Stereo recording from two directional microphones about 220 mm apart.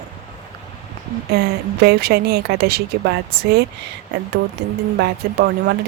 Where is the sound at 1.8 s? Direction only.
45° right (ahead or behind).